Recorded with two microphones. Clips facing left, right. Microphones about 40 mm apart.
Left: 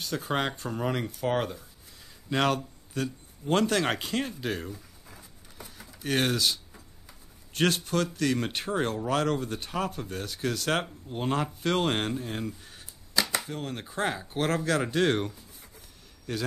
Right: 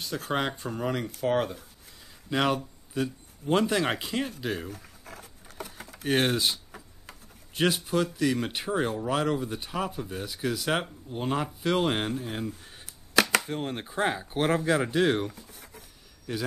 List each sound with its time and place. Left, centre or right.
0.3 s speech: centre
2.5 s speech: centre
4.6 s patter: right
6.0 s speech: right
7.5 s speech: centre
11.1 s speech: centre
13.1 s a sound: right
13.5 s speech: right
13.8 s speech: centre
14.8 s speech: centre